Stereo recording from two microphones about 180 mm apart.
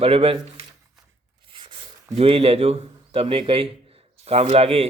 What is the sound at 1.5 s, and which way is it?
A man's voice, 25° right (ahead or behind).